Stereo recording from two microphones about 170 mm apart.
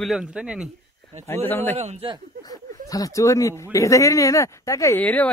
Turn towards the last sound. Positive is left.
turn(degrees=10)  # may be behind; listen again after turning